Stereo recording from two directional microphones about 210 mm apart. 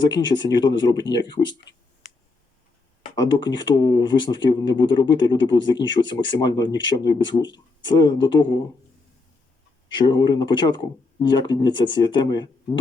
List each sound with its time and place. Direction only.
0.0 s speech: 20° left (ahead or behind)
3.2 s speech: 20° left (ahead or behind)
9.9 s speech: 20° left (ahead or behind)